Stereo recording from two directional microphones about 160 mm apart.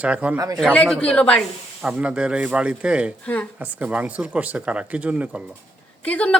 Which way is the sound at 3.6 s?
10° right (ahead or behind).